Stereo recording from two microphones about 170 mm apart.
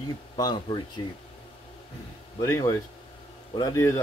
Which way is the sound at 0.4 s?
25° left (ahead or behind).